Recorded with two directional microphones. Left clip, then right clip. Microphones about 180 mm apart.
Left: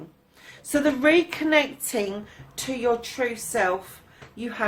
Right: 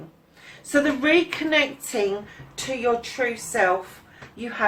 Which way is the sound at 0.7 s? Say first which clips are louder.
Even; 40° left (ahead or behind).